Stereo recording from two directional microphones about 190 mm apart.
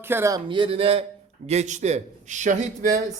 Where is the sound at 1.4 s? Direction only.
35° right (ahead or behind).